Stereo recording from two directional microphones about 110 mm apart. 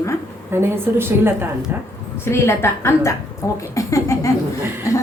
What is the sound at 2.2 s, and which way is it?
A woman's voice, 25° left (ahead or behind).